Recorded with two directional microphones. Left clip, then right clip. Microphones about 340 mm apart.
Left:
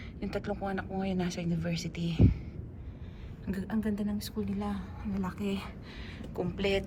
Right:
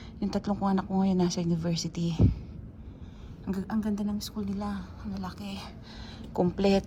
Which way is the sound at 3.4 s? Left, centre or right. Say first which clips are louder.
Right 2 dB; centre.